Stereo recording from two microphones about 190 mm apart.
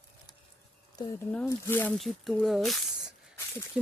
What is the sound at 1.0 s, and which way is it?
Speech, 20° left (ahead or behind).